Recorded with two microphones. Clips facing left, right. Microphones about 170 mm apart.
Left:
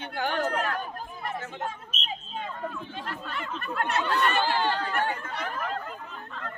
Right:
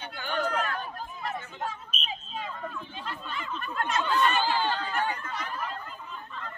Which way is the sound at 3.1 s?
65° left (ahead or behind).